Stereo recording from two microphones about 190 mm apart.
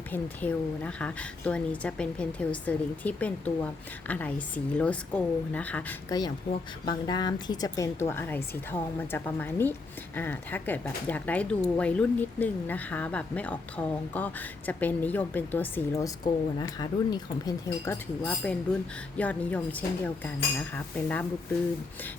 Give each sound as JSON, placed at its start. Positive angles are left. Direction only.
{"t": 0.1, "sound": "speech", "side_deg": 5}
{"t": 6.1, "sound": "a woman's voice", "side_deg": 20}